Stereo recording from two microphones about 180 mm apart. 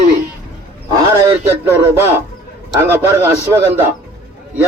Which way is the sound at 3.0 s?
15° right (ahead or behind).